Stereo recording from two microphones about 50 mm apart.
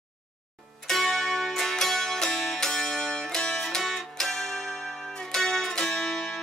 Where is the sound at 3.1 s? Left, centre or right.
Centre.